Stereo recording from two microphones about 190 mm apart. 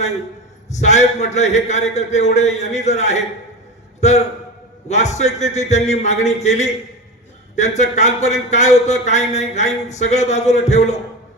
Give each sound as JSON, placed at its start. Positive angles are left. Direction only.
{"t": 0.7, "sound": "speech", "side_deg": 35}